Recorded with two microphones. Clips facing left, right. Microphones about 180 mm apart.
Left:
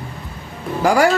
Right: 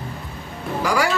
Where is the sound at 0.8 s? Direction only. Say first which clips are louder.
Left 7 dB; 50° left (ahead or behind).